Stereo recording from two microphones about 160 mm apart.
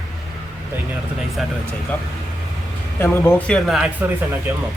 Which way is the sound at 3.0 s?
15° left (ahead or behind).